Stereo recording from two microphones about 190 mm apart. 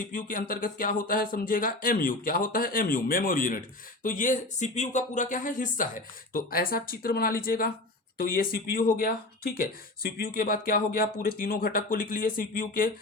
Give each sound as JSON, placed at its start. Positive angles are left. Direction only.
{"t": 0.1, "sound": "speech", "side_deg": 45}